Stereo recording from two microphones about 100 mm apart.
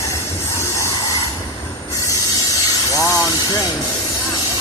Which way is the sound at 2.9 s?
35° left (ahead or behind).